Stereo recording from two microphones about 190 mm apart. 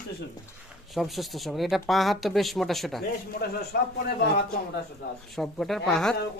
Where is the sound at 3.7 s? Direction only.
55° left (ahead or behind).